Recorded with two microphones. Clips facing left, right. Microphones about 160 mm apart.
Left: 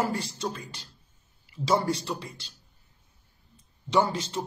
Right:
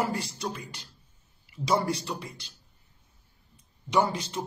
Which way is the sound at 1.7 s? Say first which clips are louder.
Left 1 dB; 25° left (ahead or behind).